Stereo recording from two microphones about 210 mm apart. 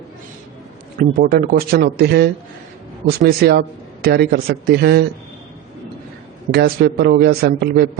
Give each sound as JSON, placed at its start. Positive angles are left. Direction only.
{"t": 0.9, "sound": "a man's voice", "side_deg": -45}
{"t": 6.5, "sound": "a man's voice", "side_deg": -50}